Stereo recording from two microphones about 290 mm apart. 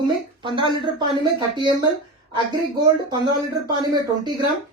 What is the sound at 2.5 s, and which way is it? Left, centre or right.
Speech, centre.